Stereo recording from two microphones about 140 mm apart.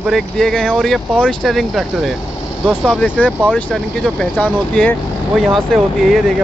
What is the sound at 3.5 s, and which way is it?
Speech, 5° left (ahead or behind).